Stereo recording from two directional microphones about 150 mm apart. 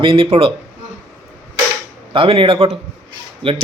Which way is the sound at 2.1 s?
35° right (ahead or behind).